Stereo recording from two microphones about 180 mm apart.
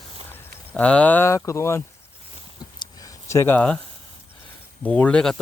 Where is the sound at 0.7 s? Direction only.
5° left (ahead or behind).